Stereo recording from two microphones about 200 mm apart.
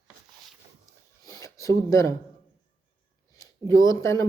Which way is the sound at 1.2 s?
15° left (ahead or behind).